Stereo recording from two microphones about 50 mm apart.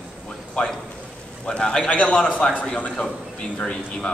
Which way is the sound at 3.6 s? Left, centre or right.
Centre.